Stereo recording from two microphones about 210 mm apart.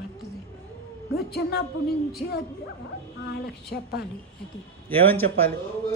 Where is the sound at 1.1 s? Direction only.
50° left (ahead or behind).